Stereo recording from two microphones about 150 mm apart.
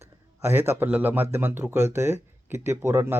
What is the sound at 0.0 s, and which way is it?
A man's voice, 15° right (ahead or behind).